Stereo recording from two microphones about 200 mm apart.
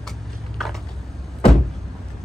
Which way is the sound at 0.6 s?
Centre (ahead or behind).